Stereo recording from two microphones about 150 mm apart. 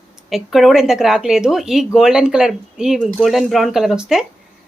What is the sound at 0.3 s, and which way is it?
Speech, centre (ahead or behind).